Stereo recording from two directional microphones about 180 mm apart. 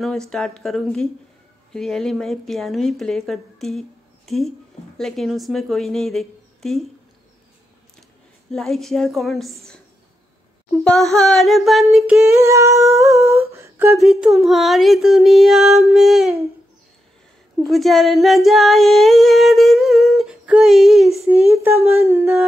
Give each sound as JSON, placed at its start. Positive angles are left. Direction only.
{"t": 0.0, "sound": "female singing", "side_deg": 0}
{"t": 4.3, "sound": "a woman's voice", "side_deg": 0}
{"t": 8.5, "sound": "female singing", "side_deg": 0}
{"t": 10.8, "sound": "female singing", "side_deg": 5}
{"t": 12.4, "sound": "speech", "side_deg": -15}
{"t": 13.9, "sound": "female singing", "side_deg": 0}
{"t": 17.6, "sound": "female singing", "side_deg": 0}
{"t": 21.3, "sound": "speech", "side_deg": -10}